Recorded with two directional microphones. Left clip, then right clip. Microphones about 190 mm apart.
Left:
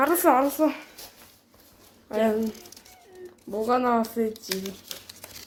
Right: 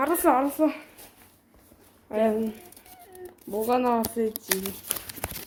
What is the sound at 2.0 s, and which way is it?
Speech, 5° right (ahead or behind).